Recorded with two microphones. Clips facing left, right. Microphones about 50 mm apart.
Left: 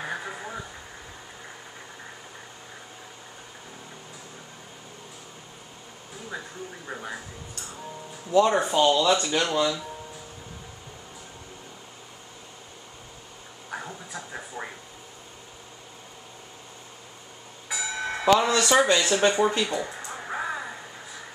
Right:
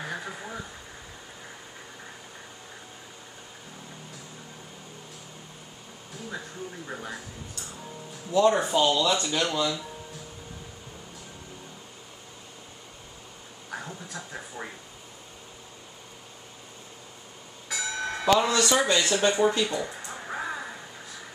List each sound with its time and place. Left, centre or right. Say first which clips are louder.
0.0 s a sound: left 2 dB; centre
6.9 s speech: left 3 dB; centre
8.3 s speech: left 1 dB; left
13.7 s a sound: left 1 dB; centre
17.6 s bell: left 1 dB; centre
18.6 s speech: left 3 dB; centre
20.1 s crow: left 2 dB; centre